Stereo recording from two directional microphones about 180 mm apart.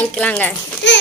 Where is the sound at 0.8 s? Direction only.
85° left.